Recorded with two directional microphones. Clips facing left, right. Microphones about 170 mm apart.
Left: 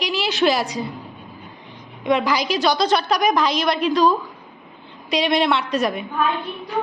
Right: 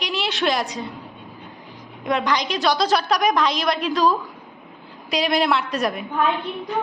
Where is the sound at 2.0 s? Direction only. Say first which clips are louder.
Left 3 dB; centre (ahead or behind).